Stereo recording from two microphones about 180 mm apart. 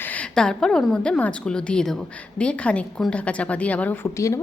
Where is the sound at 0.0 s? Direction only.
10° left (ahead or behind).